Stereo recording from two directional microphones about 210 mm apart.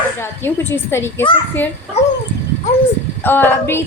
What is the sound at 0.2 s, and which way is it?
Speech, 10° left (ahead or behind).